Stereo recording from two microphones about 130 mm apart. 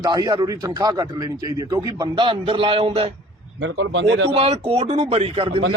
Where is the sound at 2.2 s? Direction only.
40° right (ahead or behind).